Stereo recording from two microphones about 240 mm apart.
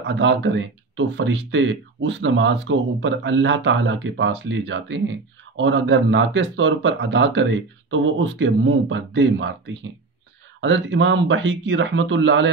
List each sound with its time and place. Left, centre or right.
0.0 s speech: right
10.6 s speech: right